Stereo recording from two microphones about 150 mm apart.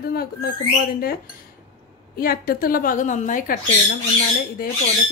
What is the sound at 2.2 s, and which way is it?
A woman's voice, 80° left.